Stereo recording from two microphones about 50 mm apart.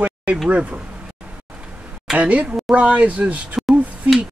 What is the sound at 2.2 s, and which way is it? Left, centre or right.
Speech, right.